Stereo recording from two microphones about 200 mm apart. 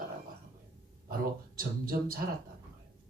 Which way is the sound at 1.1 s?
45° right (ahead or behind).